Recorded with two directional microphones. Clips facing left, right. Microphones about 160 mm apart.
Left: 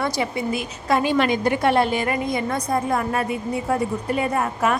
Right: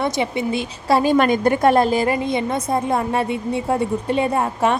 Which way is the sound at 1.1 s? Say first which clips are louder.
Right 4 dB; 50° right (ahead or behind).